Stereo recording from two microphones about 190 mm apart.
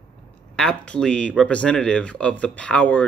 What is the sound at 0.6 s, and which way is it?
Speech, 5° left (ahead or behind).